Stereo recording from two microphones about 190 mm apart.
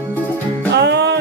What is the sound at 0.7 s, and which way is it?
Music, 60° right (ahead or behind).